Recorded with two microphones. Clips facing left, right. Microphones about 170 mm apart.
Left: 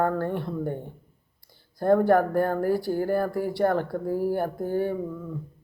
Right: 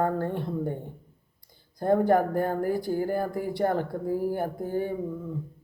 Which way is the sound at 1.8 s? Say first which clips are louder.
Left 2 dB; 20° right (ahead or behind).